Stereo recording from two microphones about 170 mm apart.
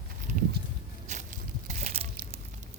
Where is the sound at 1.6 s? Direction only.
45° right (ahead or behind).